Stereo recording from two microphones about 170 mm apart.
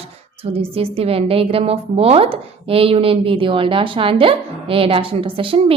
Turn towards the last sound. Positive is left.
turn(degrees=-30)  # may be behind; listen again after turning